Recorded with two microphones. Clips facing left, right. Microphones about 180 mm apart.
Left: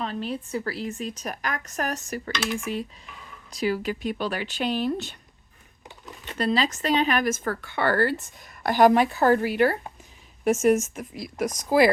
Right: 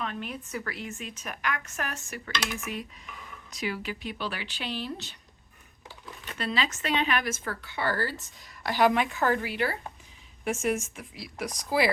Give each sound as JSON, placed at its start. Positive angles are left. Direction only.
{"t": 0.0, "sound": "speech", "side_deg": 30}
{"t": 6.3, "sound": "speech", "side_deg": 40}